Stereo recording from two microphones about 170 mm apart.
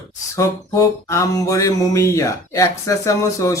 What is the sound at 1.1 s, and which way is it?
Speech, 20° left (ahead or behind).